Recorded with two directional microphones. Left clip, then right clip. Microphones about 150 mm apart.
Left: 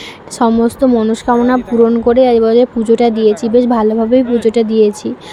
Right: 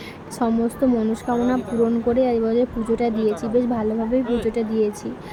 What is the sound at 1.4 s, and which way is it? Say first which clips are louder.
Speech: left 9 dB; 30° left (ahead or behind).